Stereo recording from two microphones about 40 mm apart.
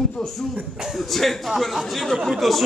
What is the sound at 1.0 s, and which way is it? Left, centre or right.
A man's voice, centre.